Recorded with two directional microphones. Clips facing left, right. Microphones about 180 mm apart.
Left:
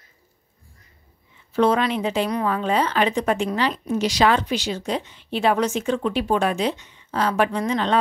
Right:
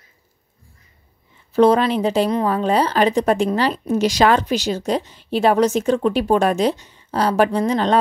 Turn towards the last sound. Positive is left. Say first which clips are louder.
# right 4 dB
turn(degrees=-40)  # may be behind; listen again after turning